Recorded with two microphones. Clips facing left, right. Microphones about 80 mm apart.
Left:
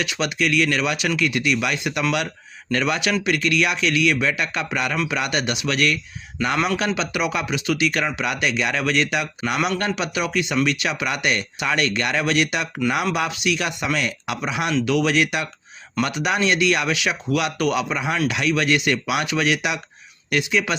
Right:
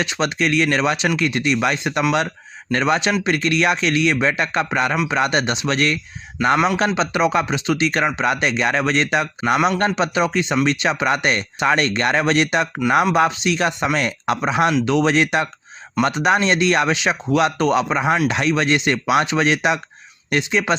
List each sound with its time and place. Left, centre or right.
0.0 s speech: right